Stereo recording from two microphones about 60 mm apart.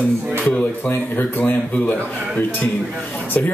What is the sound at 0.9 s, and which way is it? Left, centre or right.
Speech, left.